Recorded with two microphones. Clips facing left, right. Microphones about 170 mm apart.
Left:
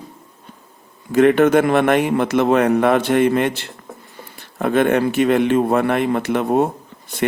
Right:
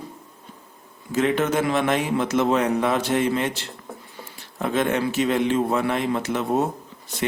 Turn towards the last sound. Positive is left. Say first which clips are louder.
# left 1 dB
turn(degrees=60)  # may be behind; listen again after turning